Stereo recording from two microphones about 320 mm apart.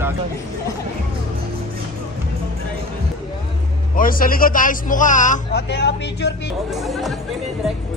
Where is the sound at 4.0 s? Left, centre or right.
Left.